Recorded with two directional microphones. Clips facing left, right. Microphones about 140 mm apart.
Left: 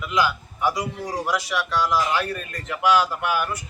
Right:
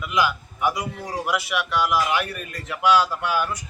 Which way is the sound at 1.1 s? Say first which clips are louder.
Even; 10° right (ahead or behind).